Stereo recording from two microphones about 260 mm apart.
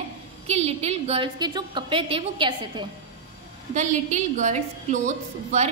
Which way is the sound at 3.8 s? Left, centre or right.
Right.